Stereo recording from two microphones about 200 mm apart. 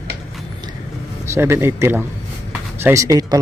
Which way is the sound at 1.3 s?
10° right (ahead or behind).